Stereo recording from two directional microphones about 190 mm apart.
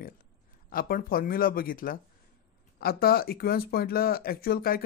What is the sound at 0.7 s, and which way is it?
Speech, 50° left (ahead or behind).